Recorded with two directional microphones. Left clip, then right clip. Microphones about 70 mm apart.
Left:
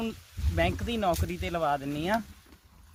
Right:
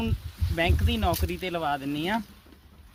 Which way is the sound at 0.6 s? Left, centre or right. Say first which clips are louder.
Right 1 dB; centre.